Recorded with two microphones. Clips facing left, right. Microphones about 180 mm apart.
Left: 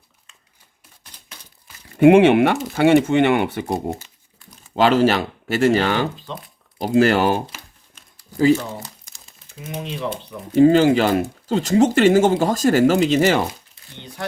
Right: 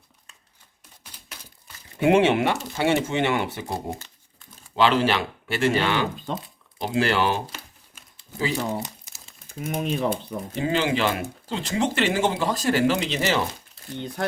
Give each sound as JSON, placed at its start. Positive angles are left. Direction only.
{"t": 1.1, "sound": "a sound", "side_deg": -10}
{"t": 2.0, "sound": "speech", "side_deg": 60}
{"t": 4.7, "sound": "speech", "side_deg": 45}
{"t": 9.6, "sound": "speech", "side_deg": -50}
{"t": 10.5, "sound": "speech", "side_deg": 45}